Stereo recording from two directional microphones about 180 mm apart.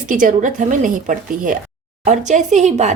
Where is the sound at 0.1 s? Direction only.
45° right (ahead or behind).